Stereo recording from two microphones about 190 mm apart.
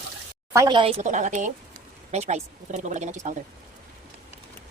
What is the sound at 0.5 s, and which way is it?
Speech, 25° right (ahead or behind).